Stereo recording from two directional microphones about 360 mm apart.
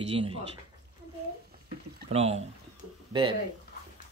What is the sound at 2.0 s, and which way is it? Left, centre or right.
Speech, centre.